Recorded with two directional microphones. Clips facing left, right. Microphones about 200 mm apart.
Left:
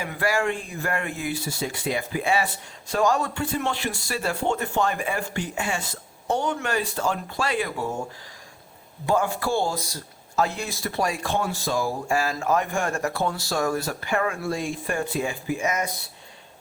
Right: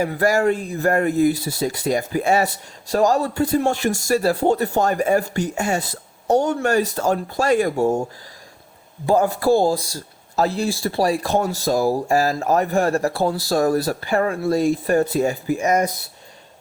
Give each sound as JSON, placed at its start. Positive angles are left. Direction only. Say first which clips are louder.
{"t": 0.0, "sound": "speech", "louder": "right 7 dB", "side_deg": -40}
{"t": 9.0, "sound": "speech", "louder": "right 7 dB", "side_deg": -40}